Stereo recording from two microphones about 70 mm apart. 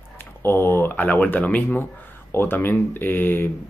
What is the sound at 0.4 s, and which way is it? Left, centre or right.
Speech, left.